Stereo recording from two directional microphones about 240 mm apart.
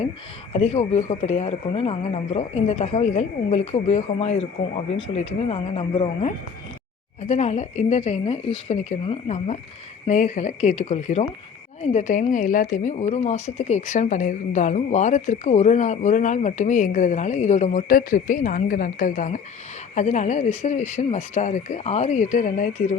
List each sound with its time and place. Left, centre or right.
0.5 s speech: left